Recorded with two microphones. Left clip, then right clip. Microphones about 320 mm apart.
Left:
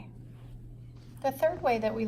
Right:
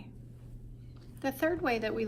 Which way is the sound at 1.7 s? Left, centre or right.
Left.